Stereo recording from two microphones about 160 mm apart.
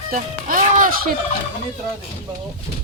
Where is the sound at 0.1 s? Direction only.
60° right (ahead or behind).